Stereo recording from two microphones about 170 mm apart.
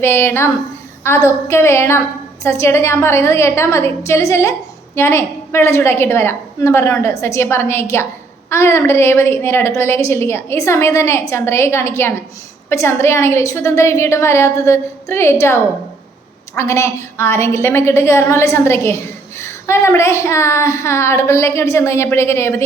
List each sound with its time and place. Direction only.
0.0 s a woman's voice: 15° left (ahead or behind)
16.6 s a woman's voice: 15° left (ahead or behind)